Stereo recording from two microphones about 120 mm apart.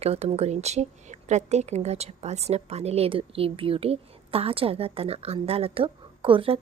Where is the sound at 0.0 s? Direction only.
60° right (ahead or behind).